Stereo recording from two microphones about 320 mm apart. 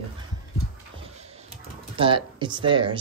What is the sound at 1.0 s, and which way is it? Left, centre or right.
Typing, centre.